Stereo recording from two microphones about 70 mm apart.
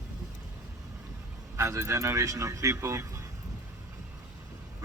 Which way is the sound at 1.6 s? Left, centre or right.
Right.